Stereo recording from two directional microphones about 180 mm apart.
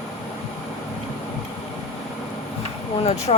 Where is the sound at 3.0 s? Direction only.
35° left (ahead or behind).